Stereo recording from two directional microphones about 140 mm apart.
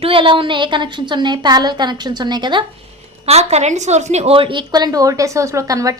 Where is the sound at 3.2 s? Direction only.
50° right (ahead or behind).